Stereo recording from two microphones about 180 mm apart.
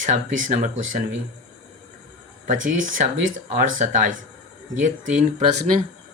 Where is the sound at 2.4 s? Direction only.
45° right (ahead or behind).